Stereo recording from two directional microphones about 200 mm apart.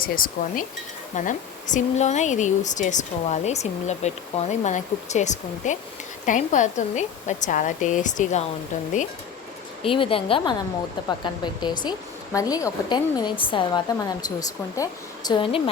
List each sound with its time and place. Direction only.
0.0 s speech: 45° left (ahead or behind)
9.8 s a woman's voice: 25° left (ahead or behind)